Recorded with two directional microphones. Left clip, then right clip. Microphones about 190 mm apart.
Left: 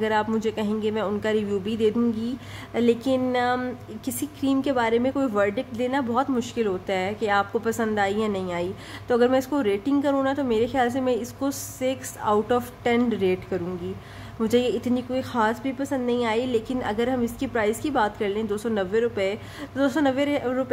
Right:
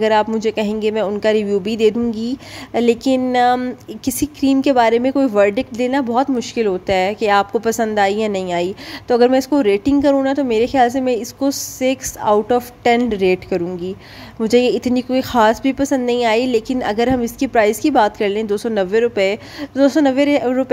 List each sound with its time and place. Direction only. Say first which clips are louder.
0.0 s a woman's voice: right 9 dB; 35° right (ahead or behind)